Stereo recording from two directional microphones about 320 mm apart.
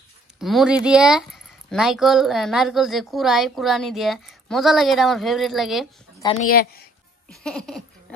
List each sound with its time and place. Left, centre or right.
0.4 s speech: centre
6.1 s a sound: centre
6.5 s a woman's voice: left
7.2 s speech: centre